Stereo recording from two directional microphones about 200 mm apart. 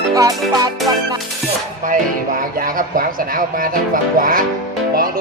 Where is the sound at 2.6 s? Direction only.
45° right (ahead or behind).